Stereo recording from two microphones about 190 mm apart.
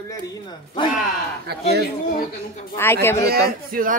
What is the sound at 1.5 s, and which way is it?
Speech, 55° right (ahead or behind).